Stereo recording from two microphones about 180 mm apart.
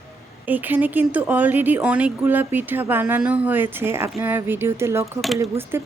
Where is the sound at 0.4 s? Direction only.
10° right (ahead or behind).